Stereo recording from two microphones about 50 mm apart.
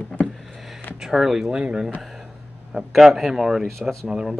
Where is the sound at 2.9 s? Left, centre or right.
Centre.